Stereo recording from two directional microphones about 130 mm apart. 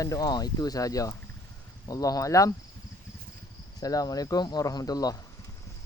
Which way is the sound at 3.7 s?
30° left (ahead or behind).